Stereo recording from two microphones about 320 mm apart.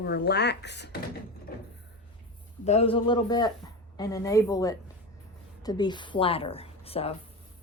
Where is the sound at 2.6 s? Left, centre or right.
Centre.